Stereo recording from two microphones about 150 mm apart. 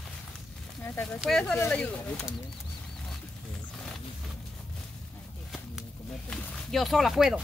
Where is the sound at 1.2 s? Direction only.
5° left (ahead or behind).